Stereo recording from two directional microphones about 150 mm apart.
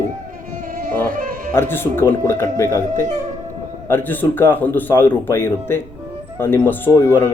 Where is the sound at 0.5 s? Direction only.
65° right (ahead or behind).